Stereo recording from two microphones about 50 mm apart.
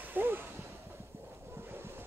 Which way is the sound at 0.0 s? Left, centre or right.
Right.